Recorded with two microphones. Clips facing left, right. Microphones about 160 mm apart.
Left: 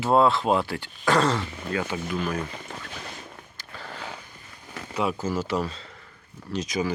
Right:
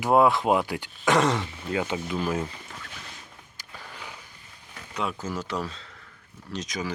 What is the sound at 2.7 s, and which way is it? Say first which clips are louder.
Boat: left 5 dB; 40° left (ahead or behind).